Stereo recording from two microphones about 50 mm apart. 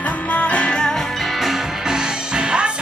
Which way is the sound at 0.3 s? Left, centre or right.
Left.